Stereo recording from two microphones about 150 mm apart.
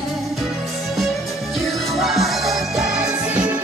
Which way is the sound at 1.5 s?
Centre (ahead or behind).